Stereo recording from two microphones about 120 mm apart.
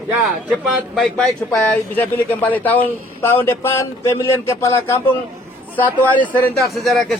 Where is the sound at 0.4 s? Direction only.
10° right (ahead or behind).